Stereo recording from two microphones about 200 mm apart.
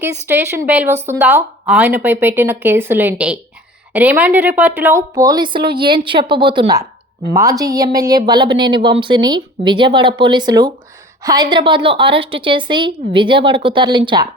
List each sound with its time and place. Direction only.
0.0 s speech: 10° right (ahead or behind)